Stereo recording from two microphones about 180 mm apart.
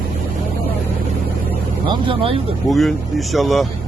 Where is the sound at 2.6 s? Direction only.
Centre (ahead or behind).